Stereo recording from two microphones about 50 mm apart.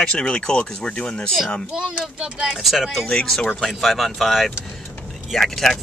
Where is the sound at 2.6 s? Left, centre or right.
Centre.